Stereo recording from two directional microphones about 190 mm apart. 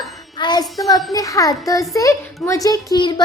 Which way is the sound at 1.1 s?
15° left (ahead or behind).